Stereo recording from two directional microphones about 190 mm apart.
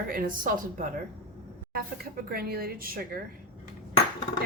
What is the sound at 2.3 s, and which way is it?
Speech, 55° right (ahead or behind).